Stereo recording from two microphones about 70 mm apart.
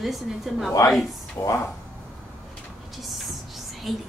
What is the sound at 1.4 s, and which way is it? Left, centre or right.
Speech, left.